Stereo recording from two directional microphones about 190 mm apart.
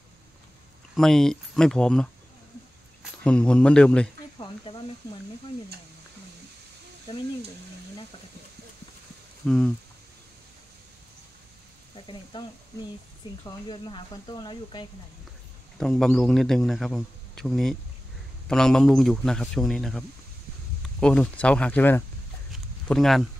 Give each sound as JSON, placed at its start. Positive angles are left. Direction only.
{"t": 0.9, "sound": "speech", "side_deg": 5}
{"t": 4.4, "sound": "a sound", "side_deg": 25}
{"t": 7.1, "sound": "speech", "side_deg": 20}
{"t": 9.4, "sound": "speech", "side_deg": 5}
{"t": 12.1, "sound": "speech", "side_deg": 25}
{"t": 15.8, "sound": "speech", "side_deg": 0}
{"t": 22.5, "sound": "a sound", "side_deg": 0}